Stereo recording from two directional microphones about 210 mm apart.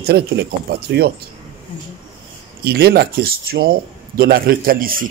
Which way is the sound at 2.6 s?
50° right (ahead or behind).